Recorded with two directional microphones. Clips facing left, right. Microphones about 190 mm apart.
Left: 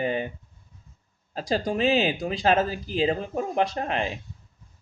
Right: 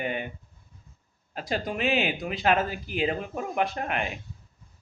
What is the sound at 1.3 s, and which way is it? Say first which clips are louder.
Speech: left 5 dB; 30° left (ahead or behind).